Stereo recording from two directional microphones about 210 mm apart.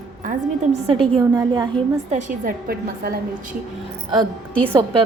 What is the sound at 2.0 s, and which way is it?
A woman's voice, 35° right (ahead or behind).